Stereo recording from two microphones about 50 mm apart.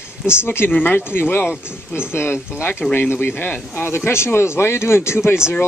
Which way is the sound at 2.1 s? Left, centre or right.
Left.